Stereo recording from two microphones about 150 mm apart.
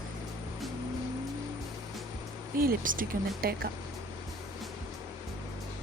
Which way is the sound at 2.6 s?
70° right (ahead or behind).